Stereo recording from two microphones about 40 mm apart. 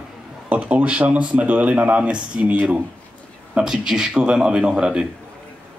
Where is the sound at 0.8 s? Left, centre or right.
Right.